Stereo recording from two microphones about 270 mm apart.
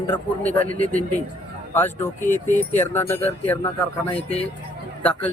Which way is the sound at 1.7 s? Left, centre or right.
Centre.